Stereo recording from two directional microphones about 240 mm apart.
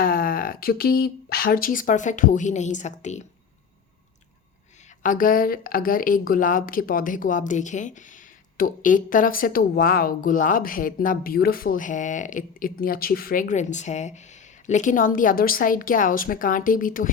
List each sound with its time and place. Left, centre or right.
0.0 s speech: left
5.0 s a woman's voice: left